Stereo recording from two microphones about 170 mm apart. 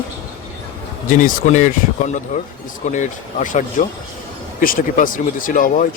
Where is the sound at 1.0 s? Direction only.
50° left (ahead or behind).